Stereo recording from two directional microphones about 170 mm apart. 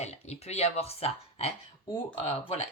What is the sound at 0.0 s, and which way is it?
Speech, 40° left (ahead or behind).